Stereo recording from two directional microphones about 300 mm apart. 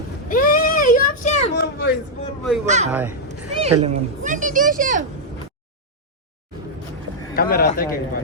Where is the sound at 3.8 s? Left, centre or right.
Right.